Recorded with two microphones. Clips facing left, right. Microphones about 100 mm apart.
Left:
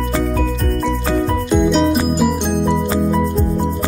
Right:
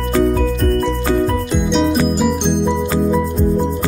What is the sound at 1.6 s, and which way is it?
Music, 5° left (ahead or behind).